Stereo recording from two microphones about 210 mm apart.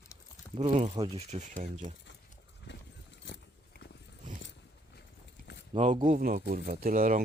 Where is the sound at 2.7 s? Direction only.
55° left (ahead or behind).